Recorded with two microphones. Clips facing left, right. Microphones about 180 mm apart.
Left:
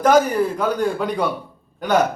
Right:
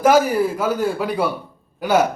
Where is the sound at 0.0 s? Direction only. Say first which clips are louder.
Even; 5° right (ahead or behind).